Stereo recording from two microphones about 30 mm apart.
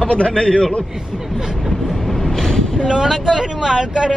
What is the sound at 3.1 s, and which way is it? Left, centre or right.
Speech, centre.